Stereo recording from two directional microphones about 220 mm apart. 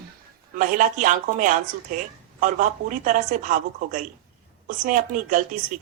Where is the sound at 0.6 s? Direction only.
35° right (ahead or behind).